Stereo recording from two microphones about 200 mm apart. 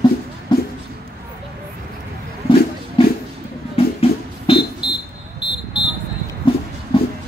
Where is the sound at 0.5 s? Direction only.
20° left (ahead or behind).